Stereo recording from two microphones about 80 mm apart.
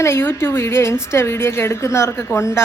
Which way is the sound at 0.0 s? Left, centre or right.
Left.